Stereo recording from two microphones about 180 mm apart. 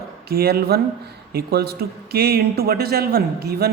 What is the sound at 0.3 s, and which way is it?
Speech, 60° right (ahead or behind).